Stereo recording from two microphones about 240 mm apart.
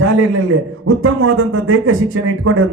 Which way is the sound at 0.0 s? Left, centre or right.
Right.